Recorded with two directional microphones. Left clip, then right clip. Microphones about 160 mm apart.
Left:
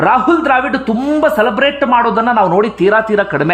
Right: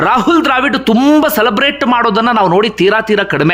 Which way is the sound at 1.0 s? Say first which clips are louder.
Right 1 dB; 15° right (ahead or behind).